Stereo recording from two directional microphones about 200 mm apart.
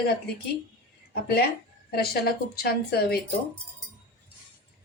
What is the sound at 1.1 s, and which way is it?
A woman's voice, 50° left (ahead or behind).